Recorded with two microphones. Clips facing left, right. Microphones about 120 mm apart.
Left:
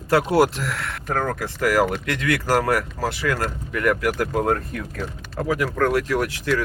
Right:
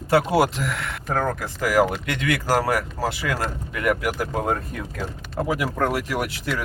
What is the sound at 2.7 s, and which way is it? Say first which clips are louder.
Speech: left 1 dB; 10° right (ahead or behind).